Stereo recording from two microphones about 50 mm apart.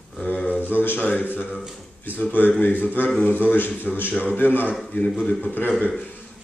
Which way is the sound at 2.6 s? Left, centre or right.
Left.